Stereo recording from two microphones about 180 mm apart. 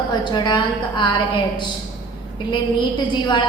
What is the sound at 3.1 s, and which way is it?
Speech, 25° left (ahead or behind).